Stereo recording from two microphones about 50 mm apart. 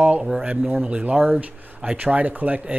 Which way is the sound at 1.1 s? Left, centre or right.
Right.